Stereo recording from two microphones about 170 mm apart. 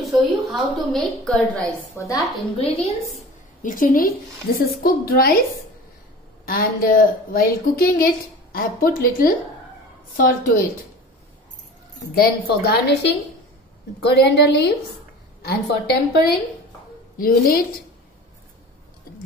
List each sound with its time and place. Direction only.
0.1 s a woman's voice: centre (ahead or behind)
2.0 s a woman's voice: 20° left (ahead or behind)
2.6 s a woman's voice: 35° left (ahead or behind)
3.6 s a woman's voice: 55° left (ahead or behind)
6.4 s a woman's voice: 60° left (ahead or behind)
12.1 s a woman's voice: 65° left (ahead or behind)
14.0 s a woman's voice: 75° left (ahead or behind)
15.4 s a woman's voice: 65° left (ahead or behind)
17.2 s a woman's voice: 60° left (ahead or behind)